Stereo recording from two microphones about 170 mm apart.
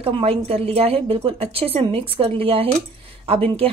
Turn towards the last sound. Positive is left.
turn(degrees=-35)  # may be behind; listen again after turning